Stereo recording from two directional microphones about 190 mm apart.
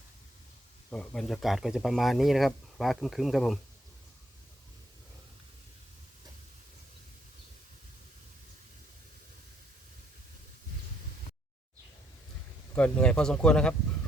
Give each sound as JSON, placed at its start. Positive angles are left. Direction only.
{"t": 0.9, "sound": "speech", "side_deg": 5}
{"t": 12.7, "sound": "speech", "side_deg": 5}